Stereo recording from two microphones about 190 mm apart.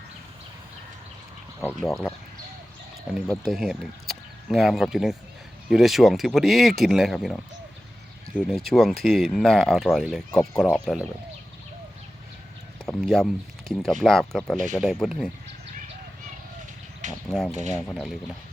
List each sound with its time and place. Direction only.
1.6 s speech: centre (ahead or behind)
3.2 s speech: centre (ahead or behind)
8.4 s speech: centre (ahead or behind)
10.3 s speech: 15° left (ahead or behind)
10.9 s speech: centre (ahead or behind)
12.8 s a sound: centre (ahead or behind)
13.7 s speech: centre (ahead or behind)
17.2 s speech: centre (ahead or behind)